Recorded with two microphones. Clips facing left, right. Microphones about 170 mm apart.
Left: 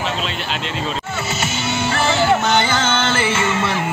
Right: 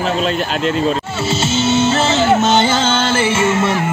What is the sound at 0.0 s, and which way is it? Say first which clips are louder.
Speech: right 7 dB; 45° right (ahead or behind).